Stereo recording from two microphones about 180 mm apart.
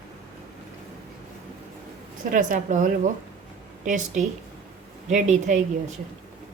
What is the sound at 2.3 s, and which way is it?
A woman's voice, 45° right (ahead or behind).